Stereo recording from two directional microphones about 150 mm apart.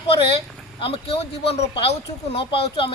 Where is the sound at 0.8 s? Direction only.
40° left (ahead or behind).